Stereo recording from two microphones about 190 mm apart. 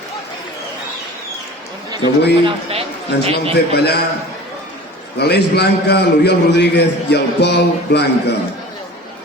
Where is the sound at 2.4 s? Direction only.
30° right (ahead or behind).